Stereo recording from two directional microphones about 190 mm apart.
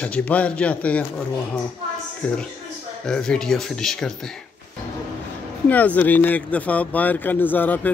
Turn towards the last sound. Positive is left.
turn(degrees=10)  # may be behind; listen again after turning